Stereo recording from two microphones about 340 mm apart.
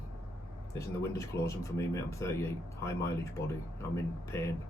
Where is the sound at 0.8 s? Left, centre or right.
Centre.